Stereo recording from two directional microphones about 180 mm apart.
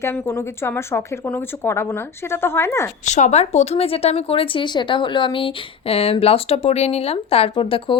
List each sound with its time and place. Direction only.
0.0 s speech: 15° left (ahead or behind)
3.0 s speech: 40° left (ahead or behind)